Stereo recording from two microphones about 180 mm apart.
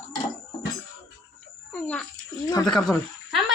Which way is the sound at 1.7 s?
5° left (ahead or behind).